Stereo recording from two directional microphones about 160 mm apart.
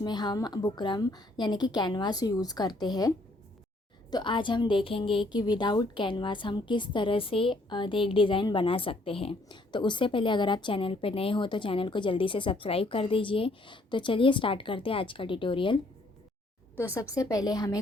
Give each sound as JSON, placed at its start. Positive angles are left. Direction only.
{"t": 0.0, "sound": "a woman's voice", "side_deg": 25}
{"t": 4.1, "sound": "a woman's voice", "side_deg": 30}
{"t": 16.7, "sound": "a woman's voice", "side_deg": 15}